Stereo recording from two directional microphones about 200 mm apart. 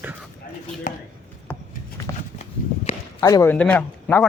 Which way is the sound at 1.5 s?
5° left (ahead or behind).